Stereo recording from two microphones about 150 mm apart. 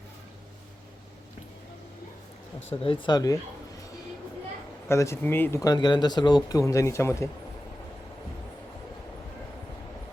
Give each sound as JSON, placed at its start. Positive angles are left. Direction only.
{"t": 2.8, "sound": "speech", "side_deg": 35}
{"t": 4.9, "sound": "speech", "side_deg": 20}